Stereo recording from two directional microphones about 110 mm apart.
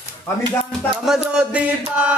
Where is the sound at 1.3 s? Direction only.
10° right (ahead or behind).